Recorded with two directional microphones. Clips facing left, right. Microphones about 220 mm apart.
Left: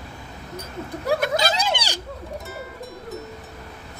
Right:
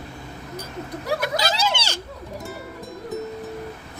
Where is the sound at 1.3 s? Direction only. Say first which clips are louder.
Left 1 dB; 15° left (ahead or behind).